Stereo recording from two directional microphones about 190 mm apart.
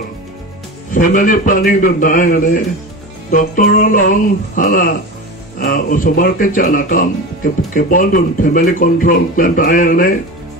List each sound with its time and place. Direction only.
0.9 s speech: 45° left (ahead or behind)